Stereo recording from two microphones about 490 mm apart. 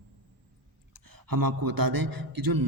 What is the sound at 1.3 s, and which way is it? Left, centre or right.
Speech, right.